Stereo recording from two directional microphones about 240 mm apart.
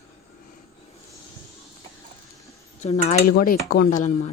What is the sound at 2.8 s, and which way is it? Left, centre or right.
Speech, left.